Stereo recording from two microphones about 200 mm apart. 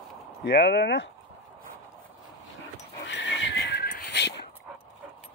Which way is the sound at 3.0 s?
65° left (ahead or behind).